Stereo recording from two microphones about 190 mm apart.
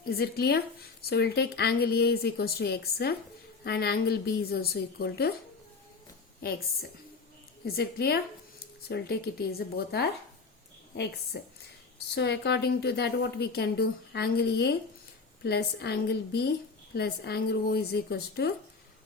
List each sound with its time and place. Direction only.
0.0 s speech: 55° left (ahead or behind)
6.4 s a woman's voice: 50° left (ahead or behind)
7.6 s speech: 55° left (ahead or behind)